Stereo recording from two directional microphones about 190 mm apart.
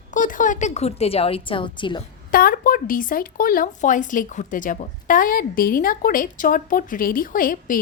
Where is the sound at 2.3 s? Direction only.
50° left (ahead or behind).